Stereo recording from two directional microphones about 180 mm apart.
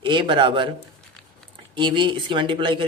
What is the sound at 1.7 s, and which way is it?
A man's voice, 25° right (ahead or behind).